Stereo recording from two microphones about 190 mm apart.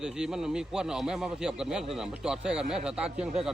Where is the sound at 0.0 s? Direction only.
5° right (ahead or behind).